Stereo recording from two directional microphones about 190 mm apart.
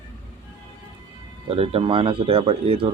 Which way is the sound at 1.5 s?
30° right (ahead or behind).